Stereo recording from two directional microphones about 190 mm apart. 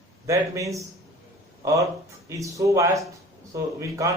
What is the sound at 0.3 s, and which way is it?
Speech, 15° right (ahead or behind).